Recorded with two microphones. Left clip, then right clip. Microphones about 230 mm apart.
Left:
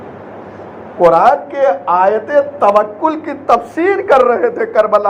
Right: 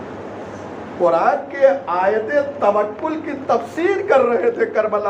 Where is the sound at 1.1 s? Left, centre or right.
Left.